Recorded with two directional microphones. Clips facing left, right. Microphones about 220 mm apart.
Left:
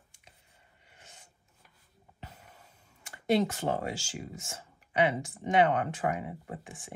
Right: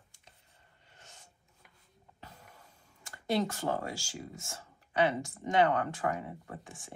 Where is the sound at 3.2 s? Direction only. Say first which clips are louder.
Left 4 dB; 20° left (ahead or behind).